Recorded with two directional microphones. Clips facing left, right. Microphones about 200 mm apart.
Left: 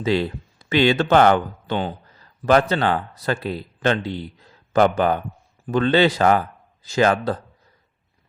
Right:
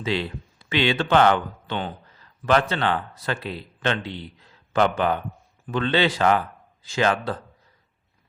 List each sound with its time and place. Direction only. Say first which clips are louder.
0.0 s speech: left 5 dB; 40° left (ahead or behind)